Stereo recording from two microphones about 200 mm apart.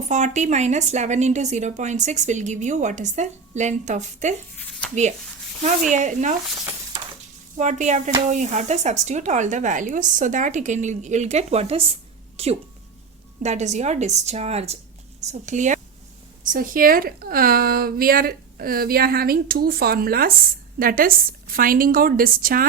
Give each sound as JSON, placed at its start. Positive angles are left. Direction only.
{"t": 0.1, "sound": "a woman's voice", "side_deg": -35}
{"t": 4.5, "sound": "a sound", "side_deg": 5}
{"t": 5.9, "sound": "a woman's voice", "side_deg": -40}
{"t": 7.5, "sound": "a woman's voice", "side_deg": -35}